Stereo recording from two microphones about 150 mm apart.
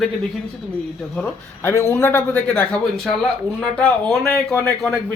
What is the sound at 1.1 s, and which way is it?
A man's voice, 10° left (ahead or behind).